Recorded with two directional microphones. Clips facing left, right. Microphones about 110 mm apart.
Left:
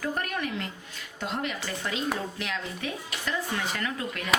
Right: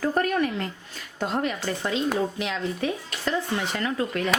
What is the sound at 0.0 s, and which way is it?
Speech, 40° right (ahead or behind).